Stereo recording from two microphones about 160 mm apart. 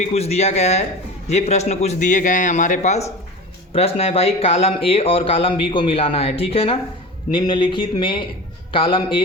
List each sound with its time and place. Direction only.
0.0 s a man's voice: 40° left (ahead or behind)